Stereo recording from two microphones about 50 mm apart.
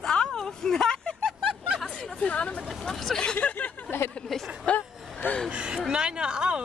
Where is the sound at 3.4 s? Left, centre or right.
Left.